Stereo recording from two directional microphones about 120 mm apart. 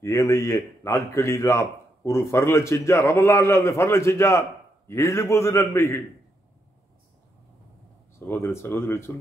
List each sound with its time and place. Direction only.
0.0 s a man's voice: 25° left (ahead or behind)
8.3 s a man's voice: 20° left (ahead or behind)